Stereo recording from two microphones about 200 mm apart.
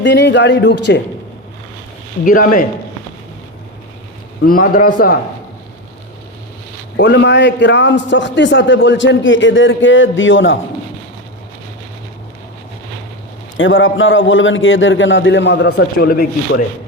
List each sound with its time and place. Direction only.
0.0 s a man's voice: 60° left (ahead or behind)
2.2 s a man's voice: 45° left (ahead or behind)
4.4 s a man's voice: 45° left (ahead or behind)
6.9 s a man's voice: 60° left (ahead or behind)
13.6 s a man's voice: 75° left (ahead or behind); by 16.6 s 50° left (ahead or behind)